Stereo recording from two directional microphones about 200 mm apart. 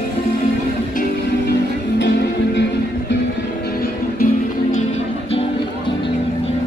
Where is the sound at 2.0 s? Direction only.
60° left (ahead or behind).